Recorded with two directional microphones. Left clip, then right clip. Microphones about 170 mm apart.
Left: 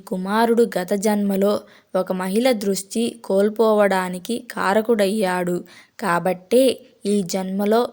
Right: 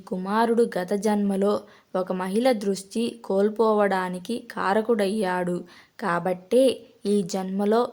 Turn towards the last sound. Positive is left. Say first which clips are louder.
# left 4 dB
turn(degrees=15)  # may be behind; listen again after turning